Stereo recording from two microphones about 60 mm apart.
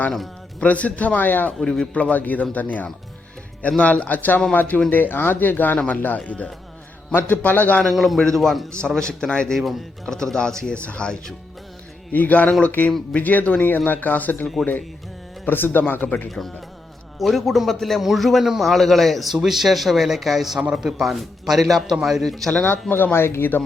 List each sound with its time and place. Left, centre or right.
0.6 s speech: left
1.6 s speech: centre
7.1 s speech: left
7.9 s a man's voice: centre
9.0 s a man's voice: centre
9.6 s a man's voice: centre
10.2 s a man's voice: centre
12.1 s speech: left
15.4 s speech: left
16.0 s speech: left
17.2 s a man's voice: centre
23.1 s speech: left